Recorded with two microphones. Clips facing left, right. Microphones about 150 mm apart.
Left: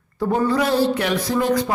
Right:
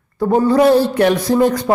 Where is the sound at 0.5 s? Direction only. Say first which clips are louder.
Right 7 dB; 50° right (ahead or behind).